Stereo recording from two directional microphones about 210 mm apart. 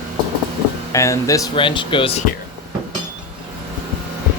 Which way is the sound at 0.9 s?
15° left (ahead or behind).